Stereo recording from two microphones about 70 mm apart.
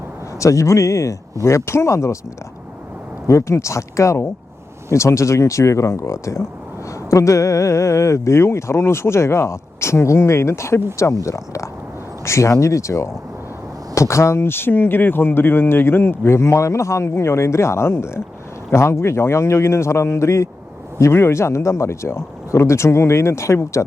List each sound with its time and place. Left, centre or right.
0.3 s speech: left
3.2 s speech: left